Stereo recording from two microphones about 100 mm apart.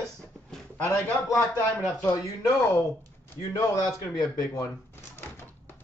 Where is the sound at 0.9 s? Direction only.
30° left (ahead or behind).